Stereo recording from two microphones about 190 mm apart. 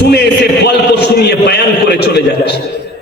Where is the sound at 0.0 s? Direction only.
60° left (ahead or behind).